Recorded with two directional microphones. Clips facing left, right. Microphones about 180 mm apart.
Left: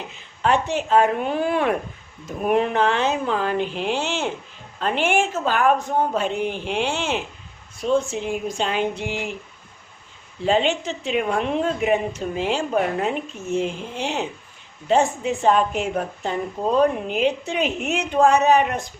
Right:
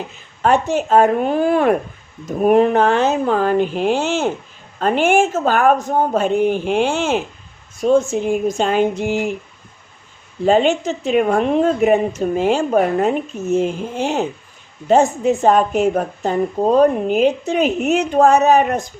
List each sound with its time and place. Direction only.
0.4 s a woman's voice: 45° right (ahead or behind)
10.4 s a woman's voice: 45° right (ahead or behind)